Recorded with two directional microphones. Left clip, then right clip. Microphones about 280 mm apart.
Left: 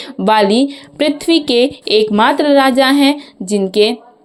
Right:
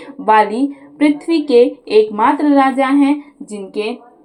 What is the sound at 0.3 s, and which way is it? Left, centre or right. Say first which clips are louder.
Speech: left 1 dB; left.